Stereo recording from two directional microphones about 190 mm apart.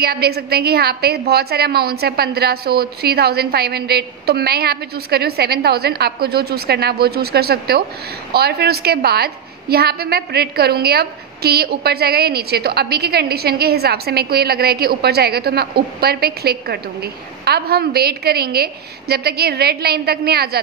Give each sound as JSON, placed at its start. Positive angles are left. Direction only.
{"t": 0.0, "sound": "a woman's voice", "side_deg": -55}